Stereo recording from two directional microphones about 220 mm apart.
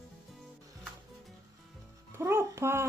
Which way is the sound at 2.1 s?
10° right (ahead or behind).